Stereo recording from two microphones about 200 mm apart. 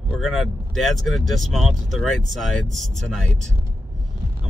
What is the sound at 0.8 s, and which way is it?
Speech, centre (ahead or behind).